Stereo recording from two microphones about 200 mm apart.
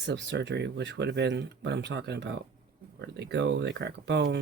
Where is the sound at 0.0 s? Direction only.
60° right (ahead or behind).